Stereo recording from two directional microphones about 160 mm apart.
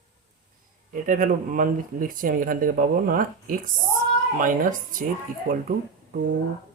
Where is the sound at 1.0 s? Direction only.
55° right (ahead or behind).